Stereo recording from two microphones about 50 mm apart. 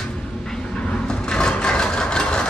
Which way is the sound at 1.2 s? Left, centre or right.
Centre.